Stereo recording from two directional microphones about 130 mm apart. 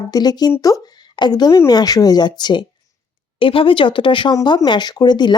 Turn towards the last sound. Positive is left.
turn(degrees=35)  # may be behind; listen again after turning